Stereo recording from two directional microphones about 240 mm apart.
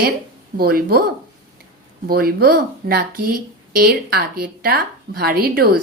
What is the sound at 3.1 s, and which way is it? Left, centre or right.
Speech, right.